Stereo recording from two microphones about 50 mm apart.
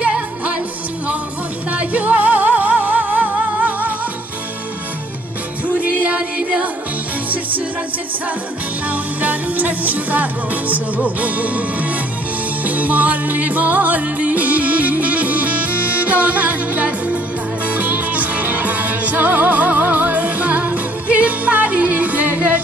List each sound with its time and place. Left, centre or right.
0.0 s music: right
1.7 s music: right
5.8 s music: right
8.8 s music: right